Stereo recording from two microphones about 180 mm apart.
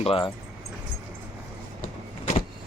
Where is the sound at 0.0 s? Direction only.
30° left (ahead or behind).